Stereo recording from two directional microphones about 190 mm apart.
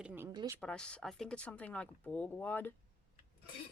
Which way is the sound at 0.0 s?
5° right (ahead or behind).